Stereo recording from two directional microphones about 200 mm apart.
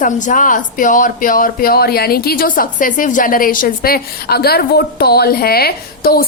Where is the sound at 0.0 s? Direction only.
40° left (ahead or behind).